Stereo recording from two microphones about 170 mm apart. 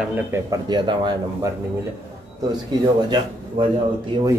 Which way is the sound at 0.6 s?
25° right (ahead or behind).